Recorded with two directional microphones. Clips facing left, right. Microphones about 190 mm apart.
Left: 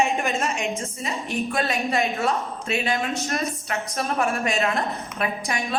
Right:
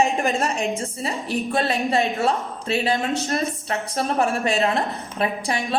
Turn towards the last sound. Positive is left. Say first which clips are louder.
# right 2 dB
turn(degrees=-30)  # may be behind; listen again after turning